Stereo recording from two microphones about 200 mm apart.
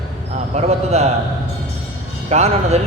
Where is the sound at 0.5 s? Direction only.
30° right (ahead or behind).